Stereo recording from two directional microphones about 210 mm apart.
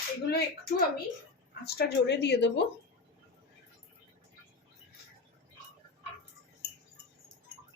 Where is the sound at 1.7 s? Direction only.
50° left (ahead or behind).